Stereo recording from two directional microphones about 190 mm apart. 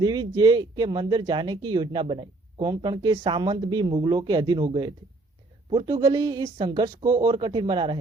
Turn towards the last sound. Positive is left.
turn(degrees=-25)  # may be behind; listen again after turning